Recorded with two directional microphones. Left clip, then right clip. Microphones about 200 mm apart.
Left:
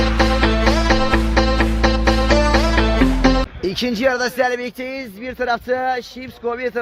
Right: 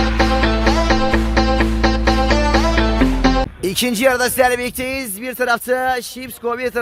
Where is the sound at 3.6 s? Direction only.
40° right (ahead or behind).